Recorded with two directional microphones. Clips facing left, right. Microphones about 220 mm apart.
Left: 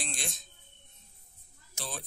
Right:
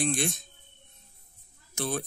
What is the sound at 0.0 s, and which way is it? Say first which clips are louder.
Speech: right 13 dB; 55° right (ahead or behind).